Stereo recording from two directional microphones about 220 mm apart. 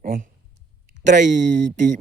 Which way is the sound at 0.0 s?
40° right (ahead or behind).